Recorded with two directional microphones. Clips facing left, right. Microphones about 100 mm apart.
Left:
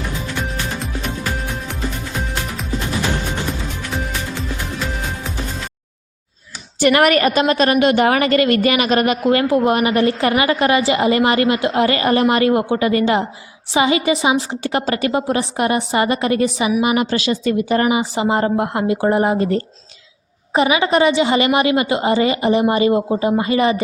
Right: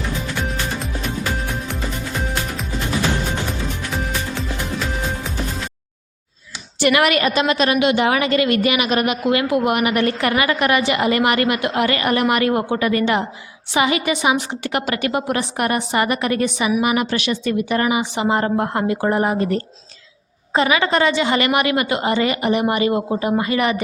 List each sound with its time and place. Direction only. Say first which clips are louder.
6.8 s a woman's voice: left 3 dB; 40° left (ahead or behind); by 23.8 s 25° left (ahead or behind)